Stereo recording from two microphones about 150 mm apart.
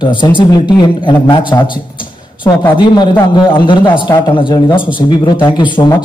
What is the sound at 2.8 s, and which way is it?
A man's voice, 30° left (ahead or behind).